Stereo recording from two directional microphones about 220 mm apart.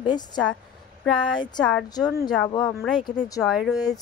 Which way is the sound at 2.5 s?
20° left (ahead or behind).